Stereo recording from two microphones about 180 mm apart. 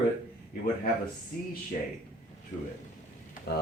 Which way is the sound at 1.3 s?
55° left (ahead or behind).